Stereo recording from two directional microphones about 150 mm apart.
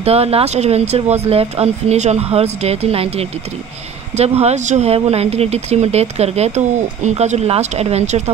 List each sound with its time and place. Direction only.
0.0 s speech: 40° right (ahead or behind)